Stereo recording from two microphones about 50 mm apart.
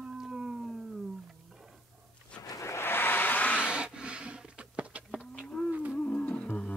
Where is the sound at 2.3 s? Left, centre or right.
Centre.